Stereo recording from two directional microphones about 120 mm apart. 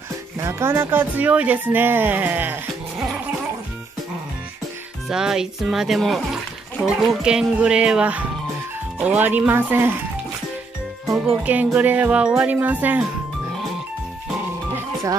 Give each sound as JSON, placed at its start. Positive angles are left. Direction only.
{"t": 0.4, "sound": "speech", "side_deg": -25}
{"t": 5.1, "sound": "speech", "side_deg": -5}
{"t": 11.1, "sound": "speech", "side_deg": -10}